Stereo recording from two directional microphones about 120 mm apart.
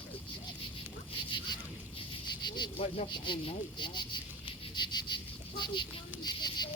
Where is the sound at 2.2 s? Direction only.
40° left (ahead or behind).